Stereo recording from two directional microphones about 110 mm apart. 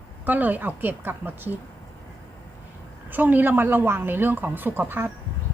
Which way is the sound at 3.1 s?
15° right (ahead or behind).